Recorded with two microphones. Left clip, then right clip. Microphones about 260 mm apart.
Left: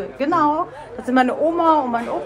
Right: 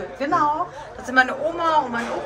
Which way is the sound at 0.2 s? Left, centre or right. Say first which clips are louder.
Left 2 dB; left.